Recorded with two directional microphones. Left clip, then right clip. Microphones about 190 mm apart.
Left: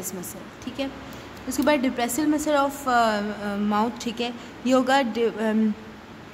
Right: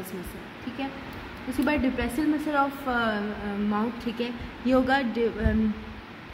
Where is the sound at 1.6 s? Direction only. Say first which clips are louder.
Left 4 dB; 20° left (ahead or behind).